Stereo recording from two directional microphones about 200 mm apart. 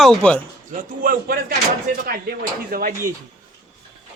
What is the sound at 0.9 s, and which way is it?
Speech, 45° right (ahead or behind).